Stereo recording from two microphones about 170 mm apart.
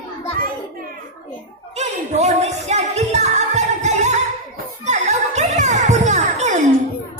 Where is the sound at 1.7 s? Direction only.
40° right (ahead or behind).